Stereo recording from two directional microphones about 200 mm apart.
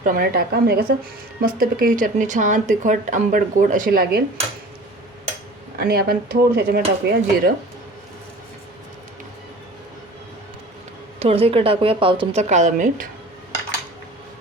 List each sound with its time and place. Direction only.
0.0 s speech: 45° right (ahead or behind)
5.7 s speech: 50° right (ahead or behind)
11.2 s speech: 30° right (ahead or behind)